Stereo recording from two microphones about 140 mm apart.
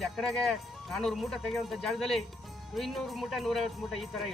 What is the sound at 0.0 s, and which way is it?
Speech, centre (ahead or behind).